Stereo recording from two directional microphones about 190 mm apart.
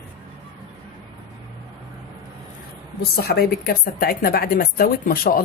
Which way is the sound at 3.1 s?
55° left (ahead or behind).